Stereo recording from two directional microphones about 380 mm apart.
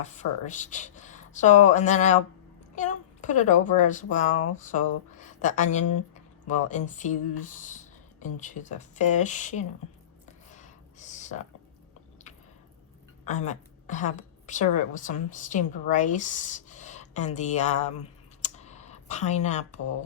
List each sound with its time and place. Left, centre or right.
0.0 s a woman's voice: centre
5.8 s speech: left
6.1 s speech: centre
10.5 s a sound: centre
13.2 s a woman's voice: centre
18.4 s computer keyboard: centre